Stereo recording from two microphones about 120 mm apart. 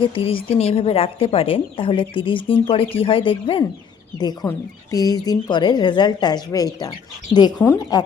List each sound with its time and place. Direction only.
0.0 s speech: 50° left (ahead or behind)
4.4 s speech: 5° left (ahead or behind)
4.9 s a woman's voice: 30° left (ahead or behind)